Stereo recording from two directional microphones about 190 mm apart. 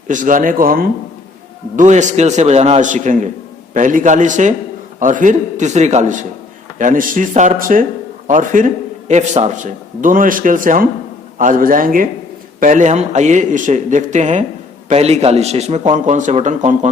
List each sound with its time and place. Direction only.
0.1 s a man's voice: 45° right (ahead or behind)